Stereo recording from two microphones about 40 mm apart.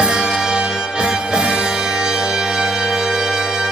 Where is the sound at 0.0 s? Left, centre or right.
Right.